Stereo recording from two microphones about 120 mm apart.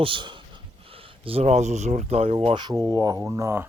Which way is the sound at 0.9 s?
55° right (ahead or behind).